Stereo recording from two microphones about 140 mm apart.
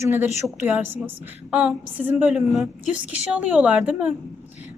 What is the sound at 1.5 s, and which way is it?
Speech, 10° right (ahead or behind).